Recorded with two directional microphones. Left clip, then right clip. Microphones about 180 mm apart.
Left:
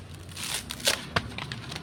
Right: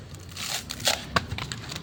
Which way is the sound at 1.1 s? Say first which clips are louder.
Right 3 dB; 30° right (ahead or behind).